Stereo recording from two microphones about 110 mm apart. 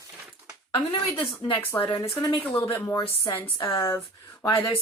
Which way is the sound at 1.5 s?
20° left (ahead or behind).